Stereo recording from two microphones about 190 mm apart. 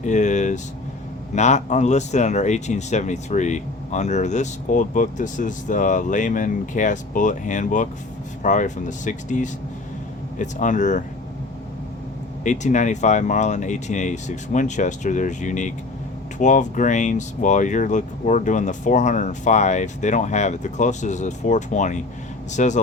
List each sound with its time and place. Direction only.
0.0 s vehicle: 40° left (ahead or behind)
1.4 s speech: 40° left (ahead or behind)
12.4 s speech: 40° left (ahead or behind)